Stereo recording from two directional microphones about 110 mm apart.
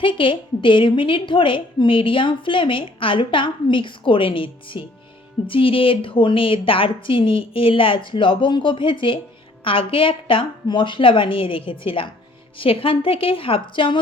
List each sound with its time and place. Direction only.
0.0 s a woman's voice: 50° left (ahead or behind)